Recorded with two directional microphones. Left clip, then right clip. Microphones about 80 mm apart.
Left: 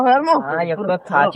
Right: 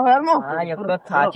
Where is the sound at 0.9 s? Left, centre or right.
Centre.